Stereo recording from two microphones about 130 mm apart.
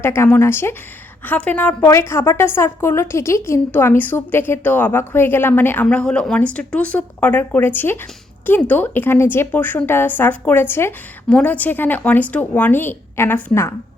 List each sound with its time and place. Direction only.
0.0 s a woman's voice: 20° left (ahead or behind)